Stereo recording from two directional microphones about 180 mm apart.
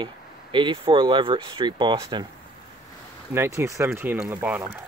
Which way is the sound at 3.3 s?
15° right (ahead or behind).